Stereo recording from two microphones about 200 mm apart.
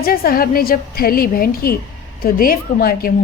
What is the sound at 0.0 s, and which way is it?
A woman's voice, 45° left (ahead or behind).